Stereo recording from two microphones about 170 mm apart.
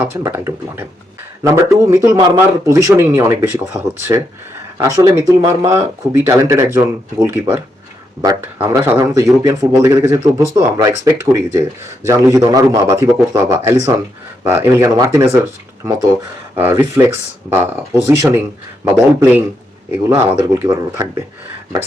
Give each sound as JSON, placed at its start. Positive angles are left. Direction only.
{"t": 0.0, "sound": "speech", "side_deg": -15}
{"t": 16.6, "sound": "speech", "side_deg": -15}